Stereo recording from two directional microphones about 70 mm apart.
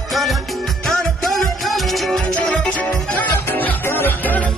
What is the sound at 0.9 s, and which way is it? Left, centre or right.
Music, centre.